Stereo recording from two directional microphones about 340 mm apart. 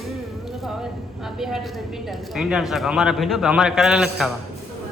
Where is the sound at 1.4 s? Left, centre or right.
Centre.